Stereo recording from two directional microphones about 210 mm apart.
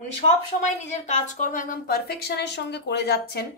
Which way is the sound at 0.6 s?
35° left (ahead or behind).